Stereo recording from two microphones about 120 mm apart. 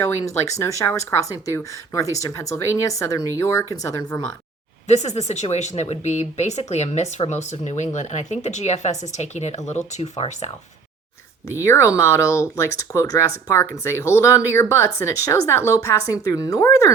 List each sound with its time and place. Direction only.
0.0 s speech: 25° left (ahead or behind)
4.9 s speech: 65° left (ahead or behind)
11.6 s speech: 25° left (ahead or behind)